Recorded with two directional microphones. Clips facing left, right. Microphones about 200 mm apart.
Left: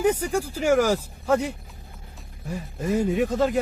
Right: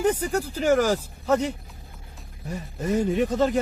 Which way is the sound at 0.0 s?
10° left (ahead or behind).